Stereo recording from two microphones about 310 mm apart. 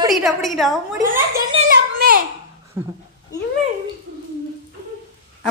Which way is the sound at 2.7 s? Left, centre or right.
Centre.